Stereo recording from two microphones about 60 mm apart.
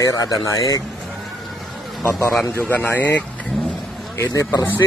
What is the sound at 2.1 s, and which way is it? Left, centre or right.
Speech, left.